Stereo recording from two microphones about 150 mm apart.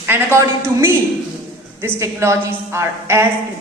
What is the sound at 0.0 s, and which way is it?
Speech, 15° right (ahead or behind).